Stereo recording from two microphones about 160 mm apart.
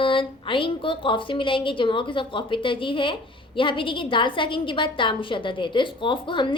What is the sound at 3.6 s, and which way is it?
A woman's voice, 30° left (ahead or behind).